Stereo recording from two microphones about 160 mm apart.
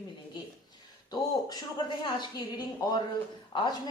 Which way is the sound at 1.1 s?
25° left (ahead or behind).